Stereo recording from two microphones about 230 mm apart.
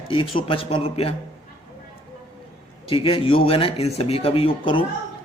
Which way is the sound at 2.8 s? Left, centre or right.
Left.